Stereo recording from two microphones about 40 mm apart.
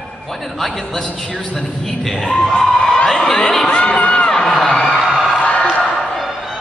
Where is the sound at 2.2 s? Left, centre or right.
Centre.